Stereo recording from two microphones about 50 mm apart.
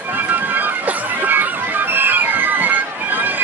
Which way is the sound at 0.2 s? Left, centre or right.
Right.